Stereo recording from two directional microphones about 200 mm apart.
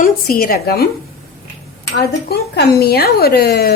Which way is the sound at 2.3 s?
50° left (ahead or behind).